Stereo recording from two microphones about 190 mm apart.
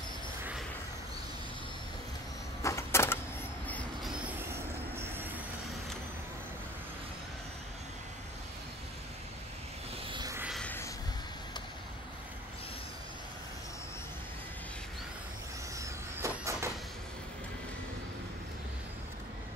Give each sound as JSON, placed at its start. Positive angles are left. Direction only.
{"t": 2.6, "sound": "a sound", "side_deg": 15}
{"t": 3.6, "sound": "train", "side_deg": 10}
{"t": 4.9, "sound": "vehicle", "side_deg": -10}
{"t": 10.0, "sound": "vehicle", "side_deg": -25}
{"t": 10.5, "sound": "vehicle", "side_deg": 10}
{"t": 15.8, "sound": "vehicle", "side_deg": -15}